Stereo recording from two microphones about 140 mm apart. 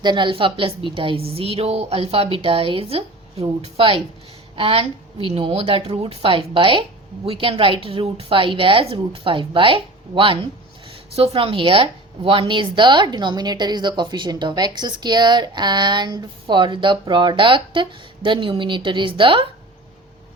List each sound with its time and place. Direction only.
0.0 s a woman's voice: 35° right (ahead or behind)